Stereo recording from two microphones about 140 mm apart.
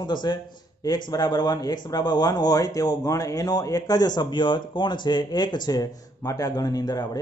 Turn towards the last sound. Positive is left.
turn(degrees=25)  # may be behind; listen again after turning